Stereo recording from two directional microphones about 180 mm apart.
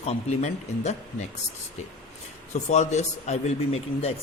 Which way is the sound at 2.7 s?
40° left (ahead or behind).